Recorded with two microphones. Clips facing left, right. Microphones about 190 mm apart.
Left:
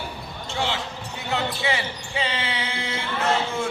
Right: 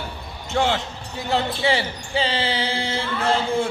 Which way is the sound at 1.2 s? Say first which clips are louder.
Right 4 dB; 35° right (ahead or behind).